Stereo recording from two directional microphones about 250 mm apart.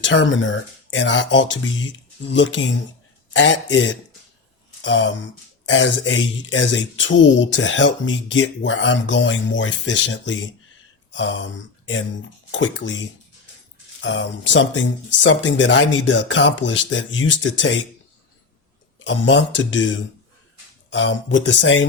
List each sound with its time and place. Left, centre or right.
0.0 s speech: left
18.9 s speech: left